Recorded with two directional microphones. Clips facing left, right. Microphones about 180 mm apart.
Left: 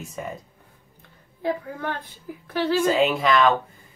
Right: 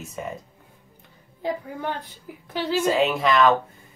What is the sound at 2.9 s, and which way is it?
Speech, centre (ahead or behind).